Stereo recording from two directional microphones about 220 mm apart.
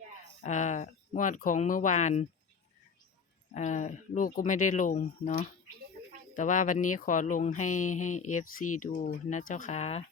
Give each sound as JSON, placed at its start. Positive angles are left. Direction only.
{"t": 0.4, "sound": "speech", "side_deg": 35}
{"t": 3.5, "sound": "speech", "side_deg": 35}